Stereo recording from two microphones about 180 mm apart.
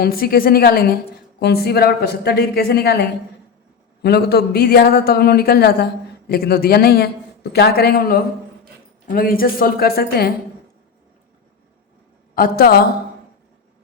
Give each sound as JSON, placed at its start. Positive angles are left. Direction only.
{"t": 0.0, "sound": "a man's voice", "side_deg": 55}
{"t": 12.3, "sound": "a man's voice", "side_deg": 55}